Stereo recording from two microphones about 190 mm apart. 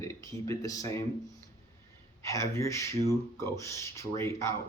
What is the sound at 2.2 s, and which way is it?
Speech, 15° left (ahead or behind).